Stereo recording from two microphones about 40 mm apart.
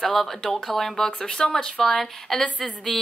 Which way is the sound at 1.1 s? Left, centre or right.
Left.